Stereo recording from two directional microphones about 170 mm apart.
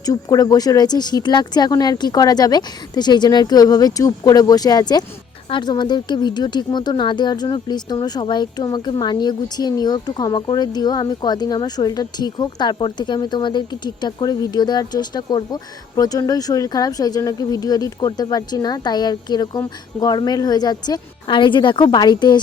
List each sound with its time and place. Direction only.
0.0 s speech: 20° left (ahead or behind)